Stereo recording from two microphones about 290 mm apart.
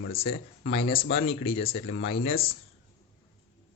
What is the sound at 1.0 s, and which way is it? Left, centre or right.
Speech, left.